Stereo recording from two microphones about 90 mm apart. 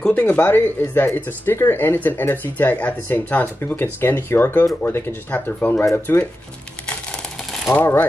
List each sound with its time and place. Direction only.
0.0 s speech: 15° left (ahead or behind)
7.7 s speech: 20° left (ahead or behind)